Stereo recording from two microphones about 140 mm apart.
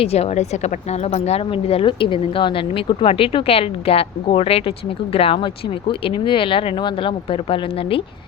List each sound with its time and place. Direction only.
0.0 s speech: 50° left (ahead or behind)